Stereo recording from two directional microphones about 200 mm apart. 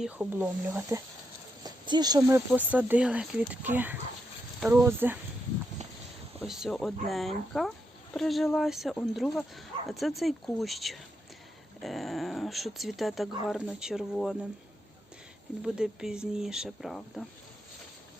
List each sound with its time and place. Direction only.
0.0 s speech: 5° right (ahead or behind)
6.4 s speech: centre (ahead or behind)
15.6 s speech: 5° right (ahead or behind)